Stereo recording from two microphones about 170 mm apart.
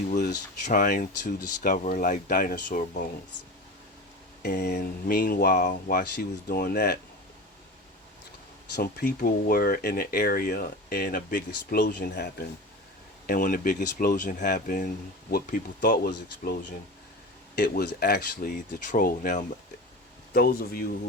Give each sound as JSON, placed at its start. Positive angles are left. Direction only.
{"t": 0.6, "sound": "speech", "side_deg": 55}
{"t": 4.4, "sound": "speech", "side_deg": 70}
{"t": 6.0, "sound": "speech", "side_deg": 70}
{"t": 8.7, "sound": "speech", "side_deg": 65}
{"t": 13.2, "sound": "speech", "side_deg": 55}
{"t": 17.6, "sound": "speech", "side_deg": 70}